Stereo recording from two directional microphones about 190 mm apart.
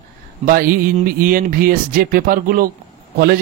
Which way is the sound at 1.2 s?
50° right (ahead or behind).